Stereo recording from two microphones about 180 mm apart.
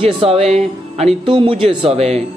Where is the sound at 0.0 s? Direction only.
30° right (ahead or behind).